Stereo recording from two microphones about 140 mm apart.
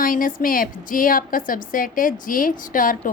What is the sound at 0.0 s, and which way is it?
A woman's voice, 80° left.